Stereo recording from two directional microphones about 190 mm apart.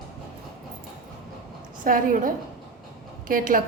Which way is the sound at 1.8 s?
45° right (ahead or behind).